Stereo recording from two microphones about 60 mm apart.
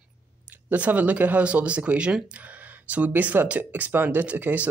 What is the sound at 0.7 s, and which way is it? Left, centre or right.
Speech, right.